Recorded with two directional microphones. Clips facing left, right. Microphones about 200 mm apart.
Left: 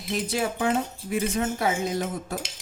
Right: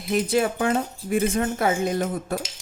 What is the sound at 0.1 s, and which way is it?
Speech, 55° right (ahead or behind).